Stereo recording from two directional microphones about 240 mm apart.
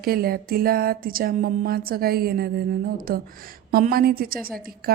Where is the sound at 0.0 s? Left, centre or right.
Right.